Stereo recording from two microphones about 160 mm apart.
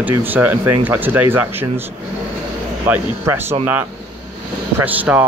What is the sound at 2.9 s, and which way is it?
Speech, 15° right (ahead or behind).